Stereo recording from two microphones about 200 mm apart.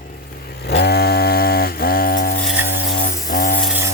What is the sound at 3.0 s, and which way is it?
Music, 45° left (ahead or behind).